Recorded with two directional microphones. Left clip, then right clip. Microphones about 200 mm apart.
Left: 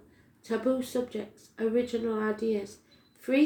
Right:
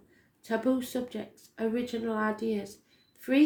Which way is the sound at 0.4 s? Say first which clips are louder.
Even; 35° right (ahead or behind).